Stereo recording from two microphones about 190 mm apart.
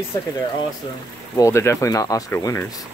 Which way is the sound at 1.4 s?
15° left (ahead or behind).